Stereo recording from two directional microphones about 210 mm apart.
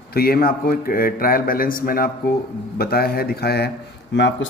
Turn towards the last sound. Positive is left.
turn(degrees=60)  # may be behind; listen again after turning